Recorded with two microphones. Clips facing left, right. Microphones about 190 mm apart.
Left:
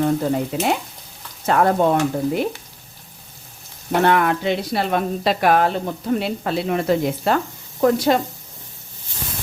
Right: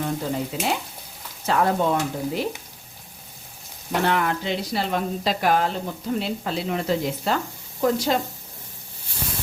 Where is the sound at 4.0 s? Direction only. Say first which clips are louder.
Left 6 dB; 60° left (ahead or behind).